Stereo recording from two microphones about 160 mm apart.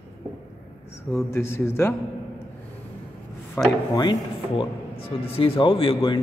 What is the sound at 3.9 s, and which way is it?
Speech, 25° left (ahead or behind).